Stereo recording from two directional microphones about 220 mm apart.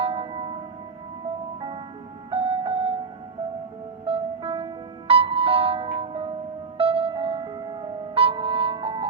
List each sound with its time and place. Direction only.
0.0 s tubular bells: 25° right (ahead or behind)
2.3 s music: 25° right (ahead or behind)
4.0 s music: 25° right (ahead or behind)